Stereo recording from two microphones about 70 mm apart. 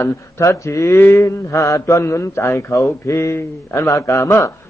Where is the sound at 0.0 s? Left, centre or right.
Left.